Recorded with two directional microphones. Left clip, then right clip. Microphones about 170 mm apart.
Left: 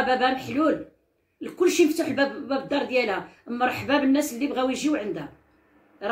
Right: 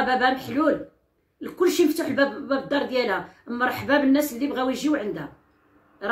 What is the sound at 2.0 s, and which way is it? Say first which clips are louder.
Speech: right 2 dB; 20° right (ahead or behind).